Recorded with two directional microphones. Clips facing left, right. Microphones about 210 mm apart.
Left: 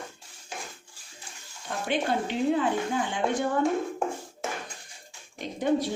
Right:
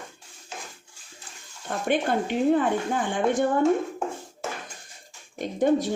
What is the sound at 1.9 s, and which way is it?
Speech, 50° right (ahead or behind).